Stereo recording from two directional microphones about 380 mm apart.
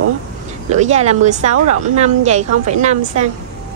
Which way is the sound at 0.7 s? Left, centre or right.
Centre.